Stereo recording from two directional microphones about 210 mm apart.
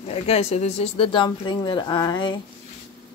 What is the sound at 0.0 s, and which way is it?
Speech, 30° left (ahead or behind).